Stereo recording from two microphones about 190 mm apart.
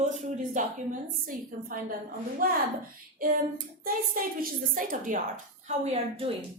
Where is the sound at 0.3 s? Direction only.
40° right (ahead or behind).